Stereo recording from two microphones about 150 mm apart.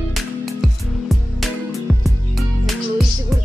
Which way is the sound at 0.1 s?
Centre (ahead or behind).